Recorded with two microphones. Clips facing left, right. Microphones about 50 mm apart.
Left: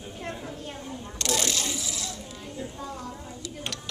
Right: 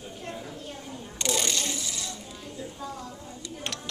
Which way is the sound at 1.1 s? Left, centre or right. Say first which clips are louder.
Left 1 dB; centre.